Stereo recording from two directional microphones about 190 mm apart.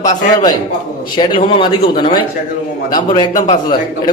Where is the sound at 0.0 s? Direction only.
20° left (ahead or behind).